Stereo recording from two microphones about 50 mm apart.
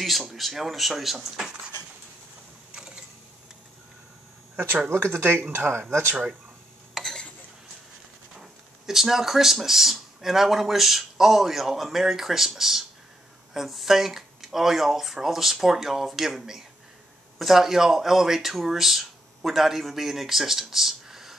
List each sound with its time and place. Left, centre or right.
0.0 s speech: centre
1.3 s speech: centre
5.0 s speech: right
5.7 s speech: right
6.9 s a sound: centre
8.4 s speech: centre